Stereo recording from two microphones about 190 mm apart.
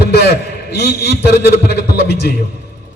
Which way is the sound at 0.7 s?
60° left (ahead or behind).